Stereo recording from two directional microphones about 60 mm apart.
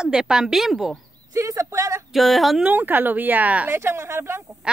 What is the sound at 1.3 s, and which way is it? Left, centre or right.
Speech, right.